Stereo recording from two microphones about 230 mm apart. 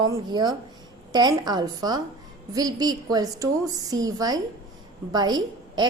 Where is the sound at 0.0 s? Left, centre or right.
Centre.